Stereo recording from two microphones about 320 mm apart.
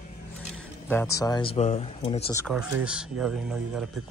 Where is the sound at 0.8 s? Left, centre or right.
Centre.